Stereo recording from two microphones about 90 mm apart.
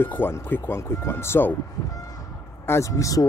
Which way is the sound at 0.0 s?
25° left (ahead or behind).